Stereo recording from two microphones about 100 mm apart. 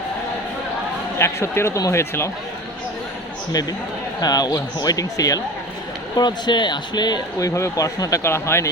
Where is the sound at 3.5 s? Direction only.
40° left (ahead or behind).